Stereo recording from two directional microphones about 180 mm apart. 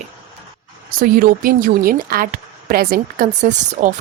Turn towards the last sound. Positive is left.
turn(degrees=-45)  # may be behind; listen again after turning